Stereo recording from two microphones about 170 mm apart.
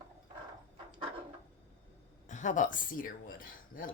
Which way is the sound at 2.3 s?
45° left (ahead or behind).